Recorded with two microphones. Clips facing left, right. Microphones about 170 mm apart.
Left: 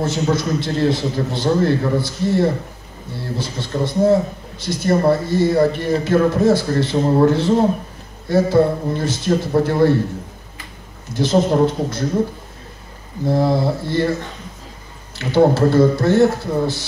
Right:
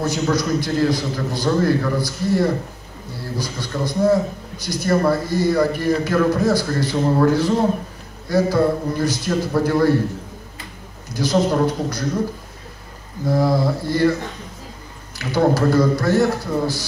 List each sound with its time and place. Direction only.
0.0 s a man's voice: 25° left (ahead or behind)
11.1 s a man's voice: 25° left (ahead or behind)
13.3 s a man's voice: 25° left (ahead or behind)
15.1 s a man's voice: 25° left (ahead or behind)